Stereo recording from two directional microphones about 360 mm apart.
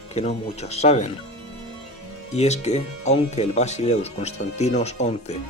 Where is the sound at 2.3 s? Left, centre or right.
Centre.